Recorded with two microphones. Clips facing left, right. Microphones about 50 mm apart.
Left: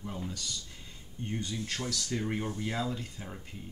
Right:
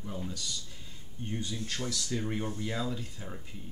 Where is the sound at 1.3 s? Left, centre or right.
Centre.